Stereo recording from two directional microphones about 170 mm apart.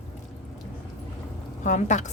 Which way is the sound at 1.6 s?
45° left (ahead or behind).